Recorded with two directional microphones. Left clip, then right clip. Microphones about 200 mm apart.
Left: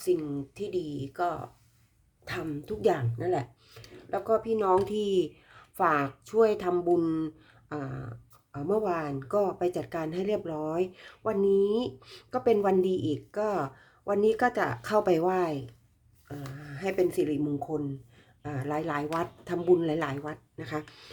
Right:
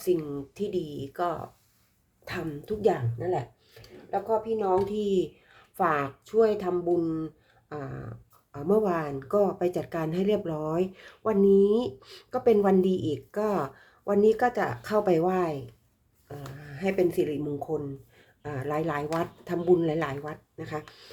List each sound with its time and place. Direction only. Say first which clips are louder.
0.0 s speech: right 1 dB; centre (ahead or behind); by 7.3 s 20° left (ahead or behind)
7.7 s speech: even; 10° left (ahead or behind)